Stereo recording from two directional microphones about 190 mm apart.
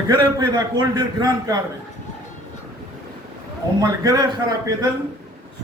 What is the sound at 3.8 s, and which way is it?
Speech, 20° right (ahead or behind).